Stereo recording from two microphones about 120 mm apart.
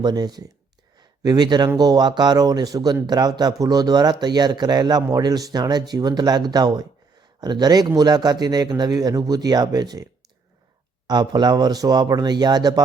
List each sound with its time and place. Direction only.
0.0 s speech: 35° right (ahead or behind)